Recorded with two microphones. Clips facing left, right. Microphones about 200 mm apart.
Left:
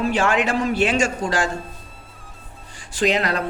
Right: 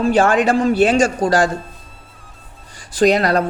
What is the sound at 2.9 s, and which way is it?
Speech, 40° right (ahead or behind).